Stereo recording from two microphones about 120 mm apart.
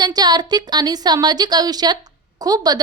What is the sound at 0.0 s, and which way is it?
A woman's voice, 35° right (ahead or behind).